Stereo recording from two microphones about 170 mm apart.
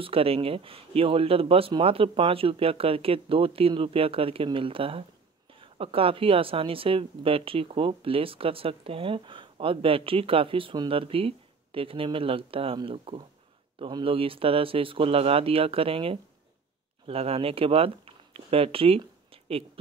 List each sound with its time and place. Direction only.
0.0 s speech: 35° right (ahead or behind)